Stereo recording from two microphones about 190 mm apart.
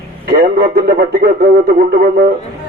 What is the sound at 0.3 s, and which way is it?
Speech, 50° right (ahead or behind).